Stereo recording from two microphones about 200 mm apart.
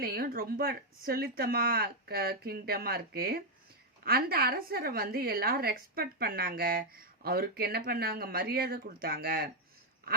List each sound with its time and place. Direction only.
0.0 s a woman's voice: 45° right (ahead or behind)